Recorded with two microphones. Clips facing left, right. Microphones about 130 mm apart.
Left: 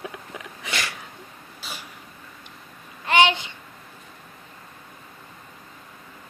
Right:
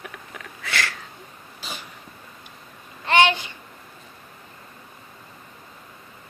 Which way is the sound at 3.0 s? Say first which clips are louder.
Right 1 dB; 15° left (ahead or behind).